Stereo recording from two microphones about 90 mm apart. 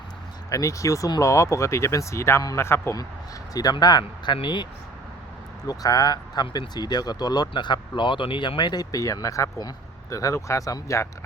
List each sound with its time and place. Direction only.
0.5 s a man's voice: 35° left (ahead or behind)
3.5 s speech: 45° left (ahead or behind)
4.4 s speech: 60° left (ahead or behind)
5.6 s speech: 40° left (ahead or behind)